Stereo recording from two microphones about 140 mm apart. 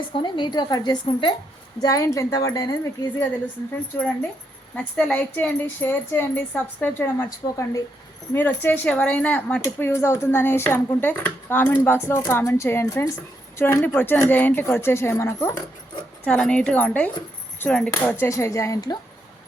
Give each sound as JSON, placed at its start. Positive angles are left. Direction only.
{"t": 0.2, "sound": "a woman's voice", "side_deg": 30}
{"t": 1.8, "sound": "speech", "side_deg": 25}
{"t": 16.2, "sound": "speech", "side_deg": 5}
{"t": 18.2, "sound": "speech", "side_deg": 20}